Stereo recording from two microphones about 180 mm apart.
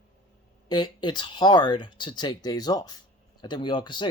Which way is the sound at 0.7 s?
25° left (ahead or behind).